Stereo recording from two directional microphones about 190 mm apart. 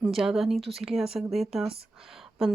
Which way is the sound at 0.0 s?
Centre (ahead or behind).